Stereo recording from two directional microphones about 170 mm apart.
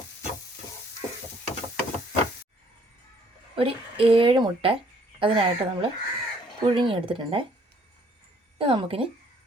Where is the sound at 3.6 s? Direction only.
30° right (ahead or behind).